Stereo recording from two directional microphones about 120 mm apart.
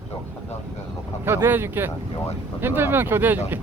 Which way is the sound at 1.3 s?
20° right (ahead or behind).